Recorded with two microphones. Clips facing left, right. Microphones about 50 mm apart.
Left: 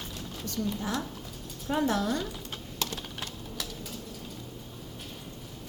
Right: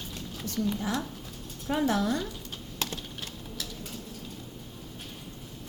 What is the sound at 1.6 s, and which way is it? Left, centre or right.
Speech, centre.